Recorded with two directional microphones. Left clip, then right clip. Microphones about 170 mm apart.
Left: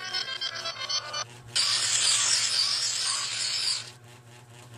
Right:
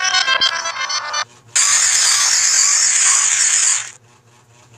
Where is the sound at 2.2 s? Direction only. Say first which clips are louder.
Right 10 dB; 45° right (ahead or behind).